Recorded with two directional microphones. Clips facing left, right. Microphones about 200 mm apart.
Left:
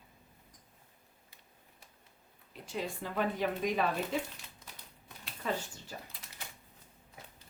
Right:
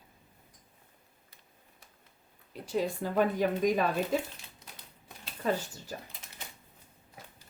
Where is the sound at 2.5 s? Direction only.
40° right (ahead or behind).